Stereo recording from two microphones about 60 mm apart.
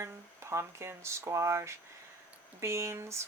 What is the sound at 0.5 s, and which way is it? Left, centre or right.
Speech, right.